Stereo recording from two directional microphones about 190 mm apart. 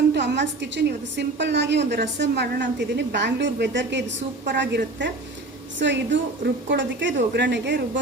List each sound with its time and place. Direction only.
0.1 s a woman's voice: 65° right (ahead or behind)